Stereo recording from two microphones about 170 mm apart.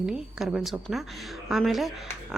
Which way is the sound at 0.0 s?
5° right (ahead or behind).